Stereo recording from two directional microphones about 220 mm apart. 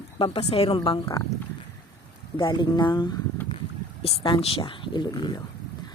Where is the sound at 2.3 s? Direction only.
20° left (ahead or behind).